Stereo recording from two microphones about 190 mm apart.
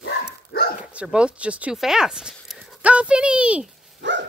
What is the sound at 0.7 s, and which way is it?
Speech, 5° right (ahead or behind).